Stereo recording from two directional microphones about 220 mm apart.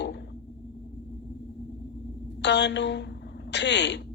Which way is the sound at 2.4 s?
50° left (ahead or behind).